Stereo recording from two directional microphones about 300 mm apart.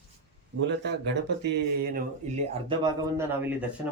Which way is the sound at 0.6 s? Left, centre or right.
Right.